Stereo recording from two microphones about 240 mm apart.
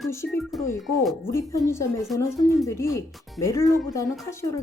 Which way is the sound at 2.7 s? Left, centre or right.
Centre.